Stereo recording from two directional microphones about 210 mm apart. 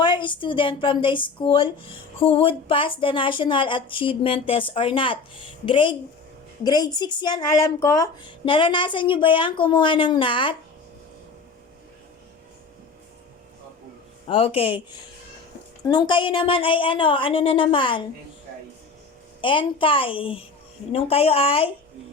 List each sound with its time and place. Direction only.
0.0 s speech: 25° left (ahead or behind)
14.3 s speech: 25° left (ahead or behind)
15.8 s speech: 20° left (ahead or behind)
19.4 s speech: 25° left (ahead or behind)